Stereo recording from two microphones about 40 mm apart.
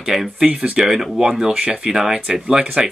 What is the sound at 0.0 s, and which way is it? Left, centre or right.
Speech, centre.